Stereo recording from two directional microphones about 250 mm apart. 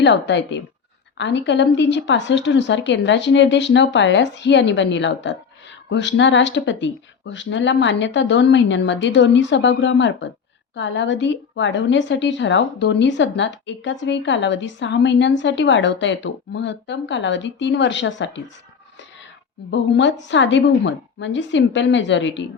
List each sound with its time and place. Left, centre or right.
0.0 s a woman's voice: left
19.7 s a woman's voice: left